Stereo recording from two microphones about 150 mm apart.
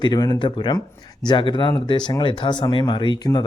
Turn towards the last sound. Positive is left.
turn(degrees=30)  # may be behind; listen again after turning